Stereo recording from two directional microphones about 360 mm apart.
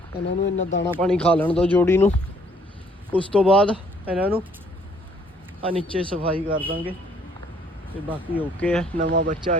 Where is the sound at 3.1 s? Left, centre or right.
Centre.